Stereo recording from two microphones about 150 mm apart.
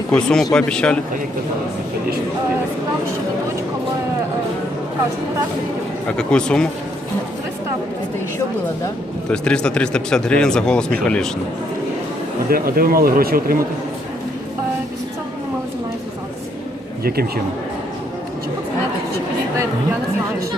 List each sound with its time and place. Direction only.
0.1 s speech: 5° left (ahead or behind)
6.1 s speech: 5° left (ahead or behind)
9.3 s speech: 5° left (ahead or behind)
12.5 s speech: 80° right
17.0 s a man's voice: 90° right